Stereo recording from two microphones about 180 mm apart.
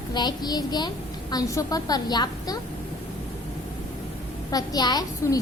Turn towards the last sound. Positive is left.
turn(degrees=20)  # may be behind; listen again after turning